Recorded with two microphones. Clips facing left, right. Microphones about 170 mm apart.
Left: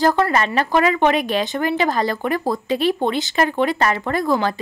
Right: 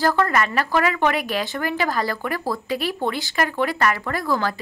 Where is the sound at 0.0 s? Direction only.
20° left (ahead or behind).